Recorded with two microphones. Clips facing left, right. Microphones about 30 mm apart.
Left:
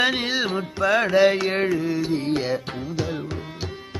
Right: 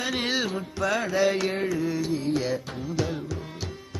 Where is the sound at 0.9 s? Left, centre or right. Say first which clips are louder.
Left 7 dB; left.